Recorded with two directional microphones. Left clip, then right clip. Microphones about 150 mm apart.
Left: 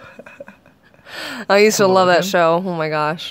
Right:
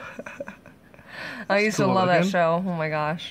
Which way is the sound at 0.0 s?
10° right (ahead or behind).